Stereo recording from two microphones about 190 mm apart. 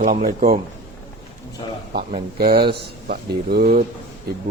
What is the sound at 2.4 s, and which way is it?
A man's voice, 55° right (ahead or behind).